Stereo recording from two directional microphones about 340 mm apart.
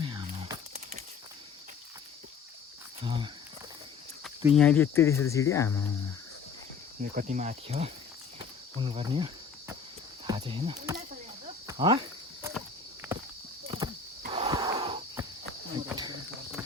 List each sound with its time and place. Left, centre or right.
0.0 s a sound: centre
3.0 s speech: centre
4.2 s speech: centre
7.0 s speech: right
8.4 s cricket: centre
10.2 s speech: centre
11.6 s cricket: centre
12.4 s walk: centre
13.7 s wheeze: centre
15.9 s cricket: centre